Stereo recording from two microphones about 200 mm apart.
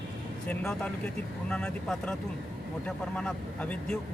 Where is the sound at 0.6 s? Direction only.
5° left (ahead or behind).